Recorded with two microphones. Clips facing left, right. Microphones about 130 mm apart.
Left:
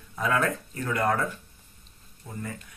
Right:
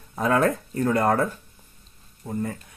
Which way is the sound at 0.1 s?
35° right (ahead or behind).